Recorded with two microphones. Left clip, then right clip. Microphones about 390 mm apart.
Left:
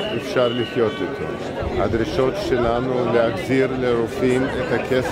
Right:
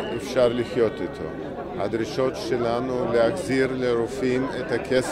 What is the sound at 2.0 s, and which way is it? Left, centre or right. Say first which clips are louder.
A man's voice: left 5 dB; right.